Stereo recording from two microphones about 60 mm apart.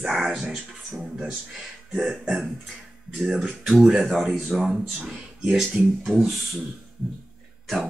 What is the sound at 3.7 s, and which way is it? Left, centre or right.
Speech, centre.